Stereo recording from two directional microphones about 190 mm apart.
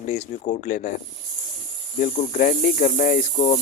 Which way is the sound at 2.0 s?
40° left (ahead or behind).